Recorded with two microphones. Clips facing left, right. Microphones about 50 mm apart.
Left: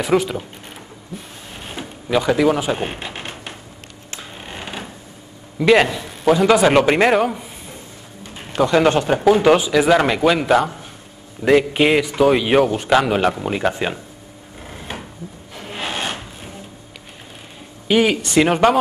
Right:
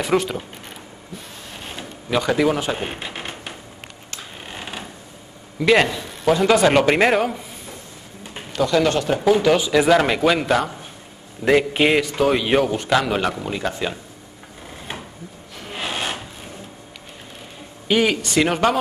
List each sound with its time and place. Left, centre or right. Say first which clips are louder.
0.0 s a man's voice: left 2 dB; centre
2.0 s speech: left 3 dB; centre
4.4 s a sound: left 2 dB; centre
5.6 s a man's voice: left 2 dB; centre
8.5 s speech: left 3 dB; left
9.7 s a man's voice: left 1 dB; centre; by 13.9 s left
15.7 s filing: left 1 dB; centre
17.8 s a man's voice: left 2 dB; centre